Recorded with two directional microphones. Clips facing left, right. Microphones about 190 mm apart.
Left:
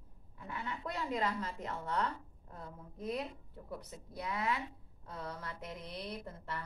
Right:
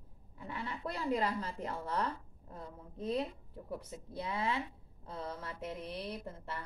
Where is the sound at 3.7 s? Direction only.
30° right (ahead or behind).